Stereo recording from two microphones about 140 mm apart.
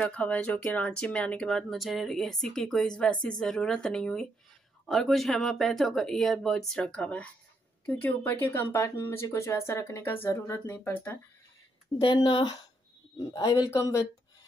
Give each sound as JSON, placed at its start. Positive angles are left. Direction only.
{"t": 0.0, "sound": "speech", "side_deg": 10}
{"t": 12.0, "sound": "a man's voice", "side_deg": 35}